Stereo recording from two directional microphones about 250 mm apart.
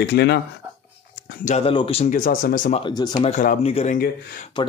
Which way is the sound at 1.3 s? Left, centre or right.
Left.